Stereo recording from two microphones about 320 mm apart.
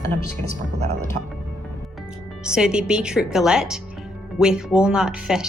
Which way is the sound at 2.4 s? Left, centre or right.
Centre.